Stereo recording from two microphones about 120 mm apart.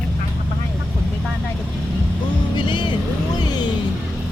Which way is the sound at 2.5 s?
40° left (ahead or behind).